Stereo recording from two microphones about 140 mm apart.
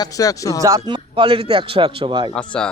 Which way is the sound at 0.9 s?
40° right (ahead or behind).